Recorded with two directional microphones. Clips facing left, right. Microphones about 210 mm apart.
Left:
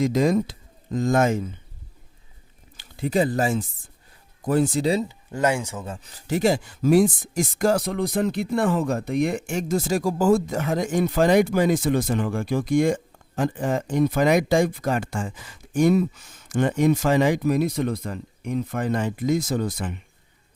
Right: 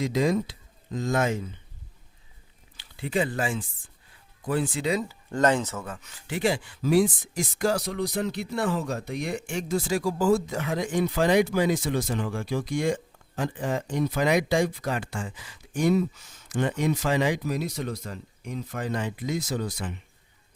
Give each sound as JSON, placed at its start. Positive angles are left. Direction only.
{"t": 0.0, "sound": "speech", "side_deg": 45}
{"t": 2.7, "sound": "speech", "side_deg": 45}
{"t": 5.3, "sound": "speech", "side_deg": 10}
{"t": 5.8, "sound": "speech", "side_deg": 30}